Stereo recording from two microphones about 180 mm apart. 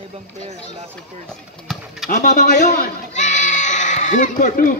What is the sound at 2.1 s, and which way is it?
Goat, 45° left (ahead or behind).